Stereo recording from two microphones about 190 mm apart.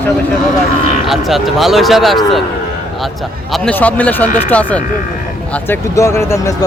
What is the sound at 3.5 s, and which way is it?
A man's voice, 5° left (ahead or behind).